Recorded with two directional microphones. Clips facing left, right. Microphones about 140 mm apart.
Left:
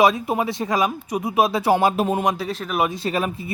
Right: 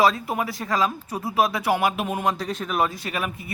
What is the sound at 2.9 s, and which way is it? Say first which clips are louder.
Speech: left 6 dB; 30° left (ahead or behind).